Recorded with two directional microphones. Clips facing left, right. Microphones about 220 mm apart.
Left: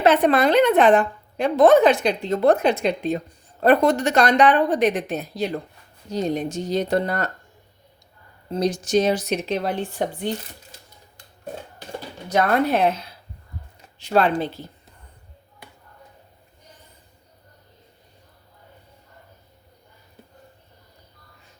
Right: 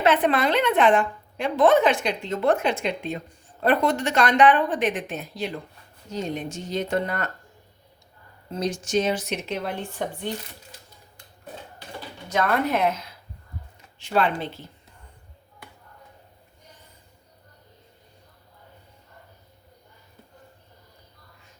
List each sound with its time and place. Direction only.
0.0 s a woman's voice: 40° left (ahead or behind)
8.4 s a woman's voice: 35° left (ahead or behind)
12.3 s a woman's voice: 35° left (ahead or behind)